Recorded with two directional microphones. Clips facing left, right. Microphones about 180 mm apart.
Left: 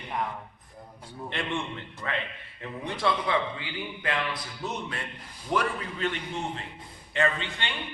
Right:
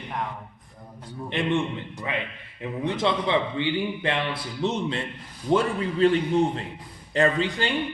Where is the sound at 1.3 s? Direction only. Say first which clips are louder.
Right 8 dB; 15° right (ahead or behind).